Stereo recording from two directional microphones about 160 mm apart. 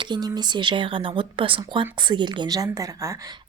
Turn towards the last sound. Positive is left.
turn(degrees=-20)  # may be behind; listen again after turning